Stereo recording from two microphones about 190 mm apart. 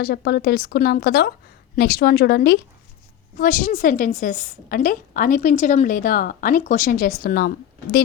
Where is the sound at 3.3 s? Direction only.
45° left (ahead or behind).